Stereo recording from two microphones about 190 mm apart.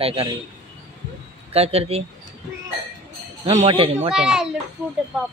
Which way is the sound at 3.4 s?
35° right (ahead or behind).